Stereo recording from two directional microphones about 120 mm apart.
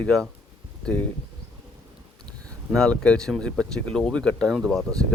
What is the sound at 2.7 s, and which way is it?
Speech, 10° left (ahead or behind).